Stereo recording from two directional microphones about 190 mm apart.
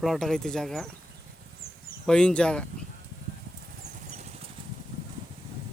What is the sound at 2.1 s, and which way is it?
Speech, 5° left (ahead or behind).